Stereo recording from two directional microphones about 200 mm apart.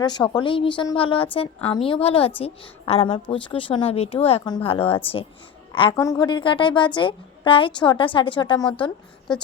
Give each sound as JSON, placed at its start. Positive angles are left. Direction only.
{"t": 0.0, "sound": "a woman's voice", "side_deg": 20}